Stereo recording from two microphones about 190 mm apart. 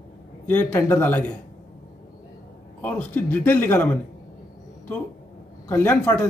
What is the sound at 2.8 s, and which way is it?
Speech, 10° left (ahead or behind).